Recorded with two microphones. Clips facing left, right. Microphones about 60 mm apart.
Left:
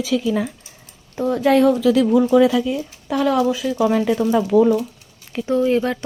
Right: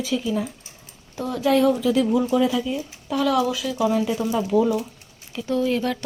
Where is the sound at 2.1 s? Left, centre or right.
Left.